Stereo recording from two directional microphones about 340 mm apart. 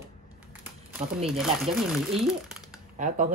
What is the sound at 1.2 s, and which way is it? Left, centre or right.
Speech, centre.